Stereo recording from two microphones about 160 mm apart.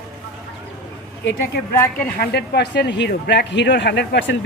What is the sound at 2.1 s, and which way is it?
Speech, 90° left.